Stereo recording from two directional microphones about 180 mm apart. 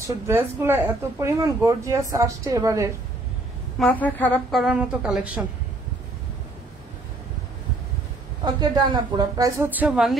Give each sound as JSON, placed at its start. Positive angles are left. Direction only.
{"t": 0.0, "sound": "speech", "side_deg": -15}
{"t": 3.8, "sound": "a woman's voice", "side_deg": 10}
{"t": 8.5, "sound": "speech", "side_deg": -25}